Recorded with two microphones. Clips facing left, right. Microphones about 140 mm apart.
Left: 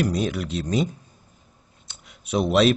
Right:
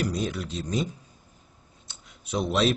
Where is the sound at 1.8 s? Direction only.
70° left (ahead or behind).